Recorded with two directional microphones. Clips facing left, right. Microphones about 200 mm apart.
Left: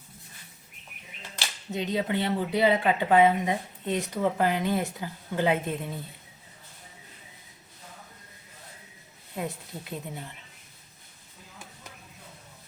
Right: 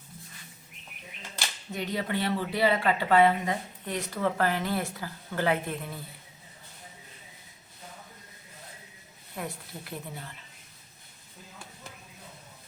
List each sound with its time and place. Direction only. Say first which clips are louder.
1.7 s speech: left 3 dB; 20° left (ahead or behind)
9.3 s speech: left 3 dB; 20° left (ahead or behind)